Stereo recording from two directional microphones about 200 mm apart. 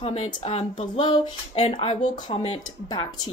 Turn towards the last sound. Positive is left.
turn(degrees=25)  # may be behind; listen again after turning